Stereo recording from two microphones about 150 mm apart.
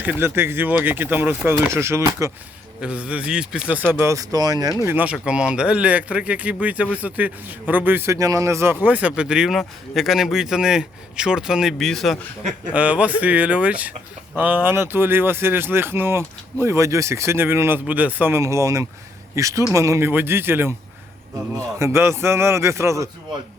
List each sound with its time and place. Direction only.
0.0 s speech: 10° right (ahead or behind)
2.8 s speech: 10° right (ahead or behind)
3.9 s a man's voice: 20° right (ahead or behind)
4.8 s speech: 15° right (ahead or behind); by 12.1 s centre (ahead or behind)
12.4 s a man's voice: 50° right (ahead or behind)
12.7 s a man's voice: 10° right (ahead or behind)